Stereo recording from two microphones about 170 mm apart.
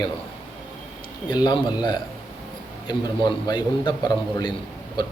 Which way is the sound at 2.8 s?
25° left (ahead or behind).